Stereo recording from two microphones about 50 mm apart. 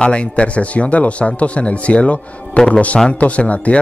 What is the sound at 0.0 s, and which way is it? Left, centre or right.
Speech, left.